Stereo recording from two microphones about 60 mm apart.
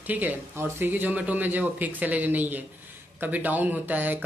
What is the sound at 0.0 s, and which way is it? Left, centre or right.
Speech, right.